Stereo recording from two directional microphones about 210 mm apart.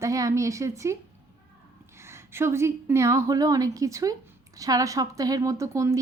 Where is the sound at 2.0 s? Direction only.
10° right (ahead or behind).